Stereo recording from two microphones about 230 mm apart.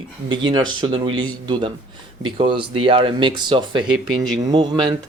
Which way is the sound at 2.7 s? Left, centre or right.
Right.